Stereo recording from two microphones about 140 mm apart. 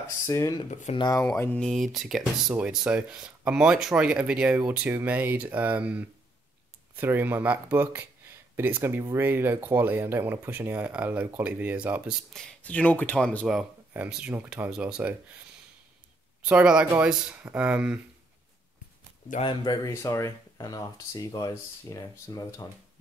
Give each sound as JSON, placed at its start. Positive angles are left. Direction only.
{"t": 0.3, "sound": "speech", "side_deg": 25}
{"t": 0.7, "sound": "speech", "side_deg": 55}
{"t": 0.9, "sound": "speech", "side_deg": 30}
{"t": 1.3, "sound": "speech", "side_deg": 15}
{"t": 1.6, "sound": "speech", "side_deg": 0}
{"t": 12.4, "sound": "speech", "side_deg": 5}
{"t": 13.5, "sound": "speech", "side_deg": -5}
{"t": 16.4, "sound": "speech", "side_deg": -10}
{"t": 19.4, "sound": "speech", "side_deg": 30}